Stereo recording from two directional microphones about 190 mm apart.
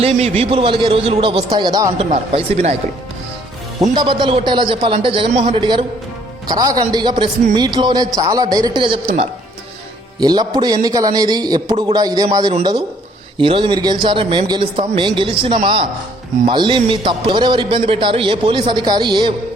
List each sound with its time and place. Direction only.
0.0 s a man's voice: 35° right (ahead or behind)
2.0 s speech: 35° right (ahead or behind)
3.8 s a man's voice: 25° right (ahead or behind)